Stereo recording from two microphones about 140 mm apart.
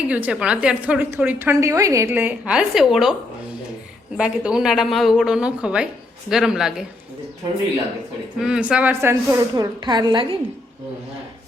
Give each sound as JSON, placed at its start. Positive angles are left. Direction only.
{"t": 0.1, "sound": "a woman's voice", "side_deg": -10}
{"t": 2.4, "sound": "a woman's voice", "side_deg": -5}
{"t": 4.2, "sound": "a woman's voice", "side_deg": -5}
{"t": 8.4, "sound": "a woman's voice", "side_deg": -5}
{"t": 9.8, "sound": "a woman's voice", "side_deg": -30}